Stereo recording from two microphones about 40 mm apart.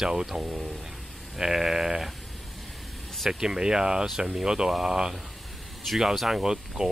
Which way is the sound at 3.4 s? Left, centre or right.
Centre.